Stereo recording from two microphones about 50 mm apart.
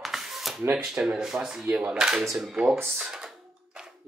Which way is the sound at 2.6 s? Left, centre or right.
Right.